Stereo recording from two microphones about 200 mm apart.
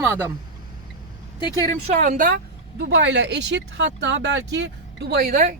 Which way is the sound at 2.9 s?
60° right (ahead or behind).